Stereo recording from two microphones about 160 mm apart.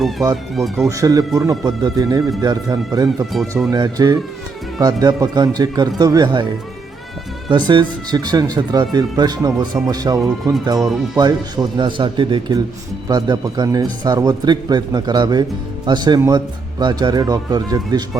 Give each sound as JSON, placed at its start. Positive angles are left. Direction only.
{"t": 0.2, "sound": "a man's voice", "side_deg": -20}
{"t": 0.5, "sound": "speech", "side_deg": 0}
{"t": 0.9, "sound": "a man's voice", "side_deg": -20}
{"t": 7.5, "sound": "a man's voice", "side_deg": -30}
{"t": 10.8, "sound": "speech", "side_deg": 0}
{"t": 11.2, "sound": "a man's voice", "side_deg": -25}